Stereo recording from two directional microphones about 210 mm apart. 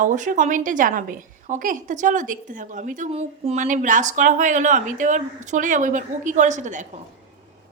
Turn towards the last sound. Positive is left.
turn(degrees=-35)  # may be behind; listen again after turning